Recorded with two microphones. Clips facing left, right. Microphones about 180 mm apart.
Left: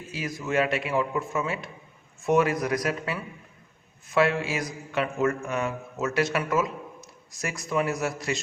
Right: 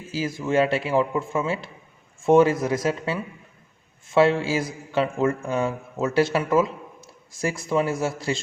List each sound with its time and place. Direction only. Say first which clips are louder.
0.1 s a man's voice: right 5 dB; 30° right (ahead or behind)